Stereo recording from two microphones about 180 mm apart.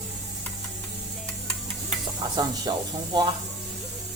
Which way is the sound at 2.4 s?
20° right (ahead or behind).